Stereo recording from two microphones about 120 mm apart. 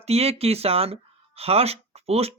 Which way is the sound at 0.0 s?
60° right (ahead or behind).